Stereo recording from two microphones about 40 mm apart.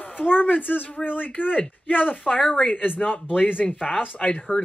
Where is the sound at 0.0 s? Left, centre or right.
Left.